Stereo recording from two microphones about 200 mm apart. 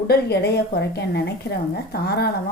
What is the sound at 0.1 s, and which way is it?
A woman's voice, 55° left (ahead or behind).